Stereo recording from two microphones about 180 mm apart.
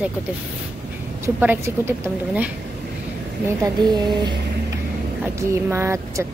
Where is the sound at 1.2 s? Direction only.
10° right (ahead or behind).